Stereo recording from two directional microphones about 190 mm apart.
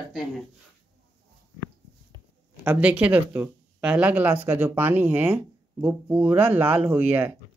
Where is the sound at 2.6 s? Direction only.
10° right (ahead or behind).